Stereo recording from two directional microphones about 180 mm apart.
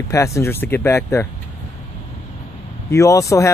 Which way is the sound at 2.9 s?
15° left (ahead or behind).